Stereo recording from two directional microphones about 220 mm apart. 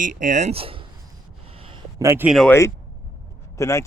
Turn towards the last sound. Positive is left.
turn(degrees=15)  # may be behind; listen again after turning